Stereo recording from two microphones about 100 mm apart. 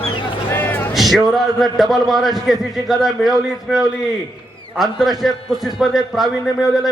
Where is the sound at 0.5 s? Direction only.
20° left (ahead or behind).